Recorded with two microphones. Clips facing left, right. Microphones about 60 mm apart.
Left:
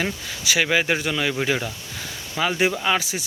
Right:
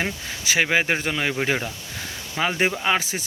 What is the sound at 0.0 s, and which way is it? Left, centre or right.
Speech, right.